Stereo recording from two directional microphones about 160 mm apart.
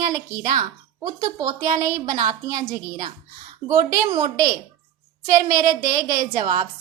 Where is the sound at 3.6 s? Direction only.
20° right (ahead or behind).